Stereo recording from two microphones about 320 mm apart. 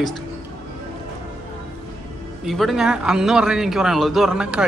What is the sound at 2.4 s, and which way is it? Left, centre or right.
A man's voice, centre.